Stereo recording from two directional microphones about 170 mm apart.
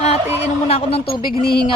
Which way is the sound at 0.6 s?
35° left (ahead or behind).